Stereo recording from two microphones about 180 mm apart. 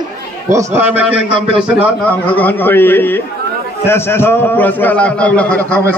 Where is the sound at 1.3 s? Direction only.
30° right (ahead or behind).